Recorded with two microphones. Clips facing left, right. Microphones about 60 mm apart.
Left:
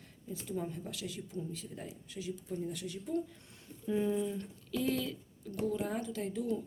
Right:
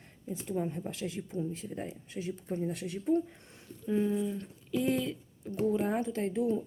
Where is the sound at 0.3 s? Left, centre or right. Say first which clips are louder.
Right 5 dB; right.